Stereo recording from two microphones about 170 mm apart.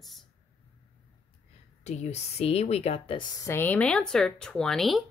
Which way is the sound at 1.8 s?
40° left (ahead or behind).